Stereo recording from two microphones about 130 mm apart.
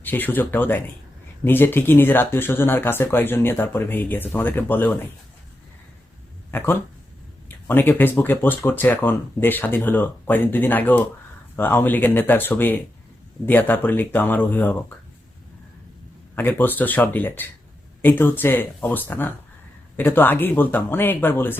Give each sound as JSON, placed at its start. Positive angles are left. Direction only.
{"t": 0.0, "sound": "speech", "side_deg": 15}
{"t": 6.5, "sound": "speech", "side_deg": 15}
{"t": 16.3, "sound": "speech", "side_deg": 15}